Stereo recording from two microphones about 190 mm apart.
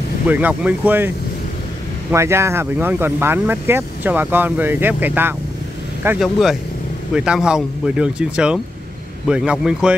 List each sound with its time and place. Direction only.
0.3 s a man's voice: 10° right (ahead or behind)